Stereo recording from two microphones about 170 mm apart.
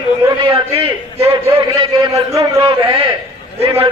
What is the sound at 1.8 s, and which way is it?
Speech, 20° right (ahead or behind).